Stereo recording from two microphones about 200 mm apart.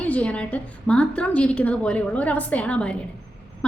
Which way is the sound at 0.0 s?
5° left (ahead or behind).